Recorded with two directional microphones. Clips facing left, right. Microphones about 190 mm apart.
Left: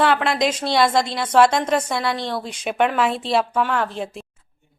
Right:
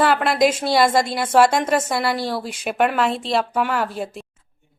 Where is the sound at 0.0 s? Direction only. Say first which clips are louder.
Right 2 dB; 5° right (ahead or behind).